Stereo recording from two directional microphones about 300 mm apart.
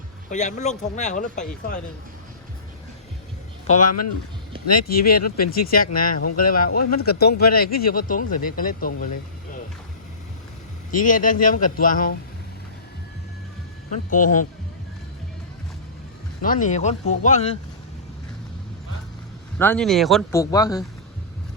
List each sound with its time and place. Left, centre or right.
0.3 s speech: left
3.8 s speech: left
4.5 s a sound: centre
4.9 s speech: left
10.9 s speech: left
14.2 s a man's voice: left
16.4 s speech: left
19.5 s speech: centre